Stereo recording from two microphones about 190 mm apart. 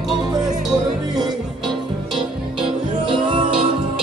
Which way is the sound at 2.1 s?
25° right (ahead or behind).